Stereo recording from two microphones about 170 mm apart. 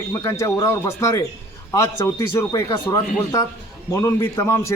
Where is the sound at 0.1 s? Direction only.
15° left (ahead or behind).